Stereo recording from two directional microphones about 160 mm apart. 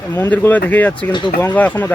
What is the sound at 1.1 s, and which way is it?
Speech, 30° left (ahead or behind).